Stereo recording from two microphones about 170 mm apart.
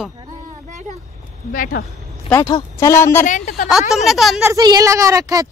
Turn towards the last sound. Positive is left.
turn(degrees=-20)  # may be behind; listen again after turning